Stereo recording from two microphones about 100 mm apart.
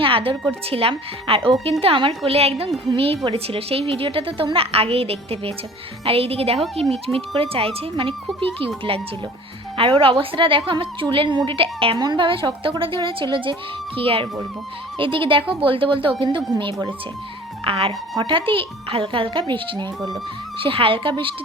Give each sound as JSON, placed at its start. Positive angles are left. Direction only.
{"t": 0.0, "sound": "a woman's voice", "side_deg": -65}
{"t": 2.9, "sound": "a woman's voice", "side_deg": -70}
{"t": 11.9, "sound": "a woman's voice", "side_deg": -50}
{"t": 17.7, "sound": "a woman's voice", "side_deg": -70}
{"t": 18.2, "sound": "a woman's voice", "side_deg": -60}
{"t": 20.6, "sound": "a woman's voice", "side_deg": -65}